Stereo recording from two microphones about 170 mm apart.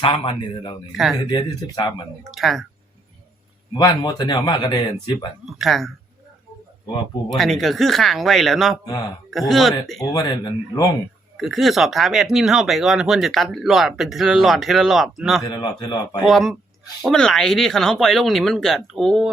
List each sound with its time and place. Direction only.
0.0 s speech: 30° left (ahead or behind)
2.3 s speech: centre (ahead or behind)
3.8 s speech: 25° left (ahead or behind)
5.5 s speech: centre (ahead or behind)
7.3 s speech: centre (ahead or behind)
10.1 s speech: 25° left (ahead or behind)
11.3 s speech: centre (ahead or behind)
15.4 s speech: 25° left (ahead or behind)
16.2 s speech: centre (ahead or behind)